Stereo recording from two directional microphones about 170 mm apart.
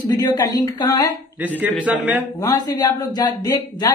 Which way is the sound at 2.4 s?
25° left (ahead or behind).